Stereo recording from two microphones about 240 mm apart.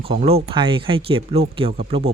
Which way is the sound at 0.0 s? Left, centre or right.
Right.